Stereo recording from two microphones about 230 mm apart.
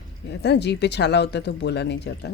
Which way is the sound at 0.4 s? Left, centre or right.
Left.